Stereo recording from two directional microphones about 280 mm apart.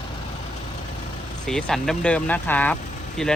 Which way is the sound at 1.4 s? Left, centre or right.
Centre.